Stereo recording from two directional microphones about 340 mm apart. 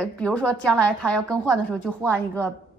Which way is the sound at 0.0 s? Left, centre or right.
Centre.